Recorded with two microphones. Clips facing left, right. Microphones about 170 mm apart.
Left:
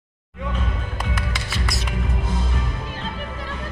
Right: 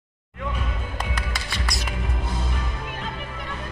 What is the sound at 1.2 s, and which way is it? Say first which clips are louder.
Music: left 2 dB; 5° left (ahead or behind).